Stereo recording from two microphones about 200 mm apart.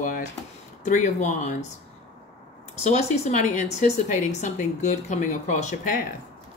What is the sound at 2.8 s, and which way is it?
A woman's voice, 35° left (ahead or behind).